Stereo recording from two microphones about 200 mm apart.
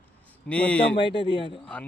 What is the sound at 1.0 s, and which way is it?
Speech, 25° left (ahead or behind).